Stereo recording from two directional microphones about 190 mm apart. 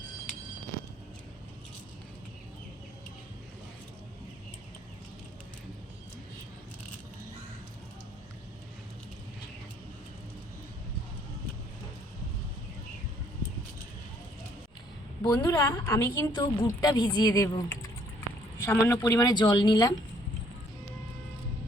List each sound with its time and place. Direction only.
15.2 s a woman's voice: 20° left (ahead or behind)